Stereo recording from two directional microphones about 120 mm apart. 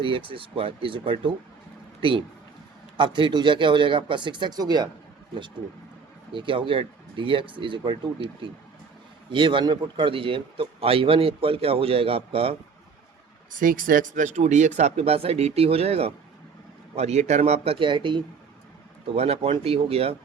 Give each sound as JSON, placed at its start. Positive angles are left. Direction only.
{"t": 0.0, "sound": "a man's voice", "side_deg": -45}
{"t": 6.3, "sound": "a man's voice", "side_deg": -45}
{"t": 9.3, "sound": "a man's voice", "side_deg": -45}
{"t": 13.5, "sound": "speech", "side_deg": -90}
{"t": 14.8, "sound": "speech", "side_deg": -65}
{"t": 19.1, "sound": "speech", "side_deg": -55}